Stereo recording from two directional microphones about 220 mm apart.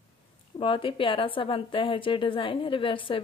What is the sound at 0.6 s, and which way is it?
A woman's voice, 25° left (ahead or behind).